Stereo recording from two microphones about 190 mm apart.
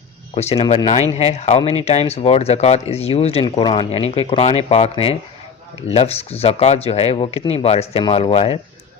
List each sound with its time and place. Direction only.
0.3 s speech: 30° left (ahead or behind)